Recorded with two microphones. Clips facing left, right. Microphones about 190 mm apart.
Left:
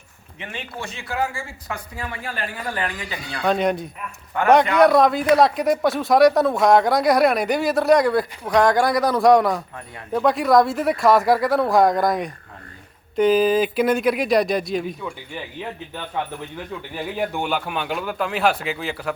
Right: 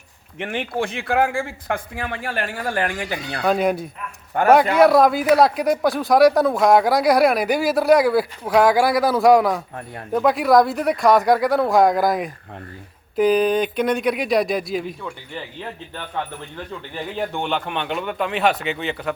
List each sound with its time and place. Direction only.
0.3 s a man's voice: 55° right (ahead or behind)
3.4 s speech: 5° right (ahead or behind)
4.4 s a man's voice: 45° right (ahead or behind)
4.7 s speech: 5° right (ahead or behind)
16.1 s speech: 10° left (ahead or behind)